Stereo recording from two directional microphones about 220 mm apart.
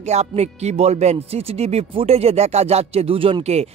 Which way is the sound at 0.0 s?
30° right (ahead or behind).